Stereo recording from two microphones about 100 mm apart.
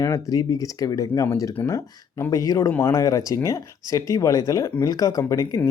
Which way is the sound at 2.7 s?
20° left (ahead or behind).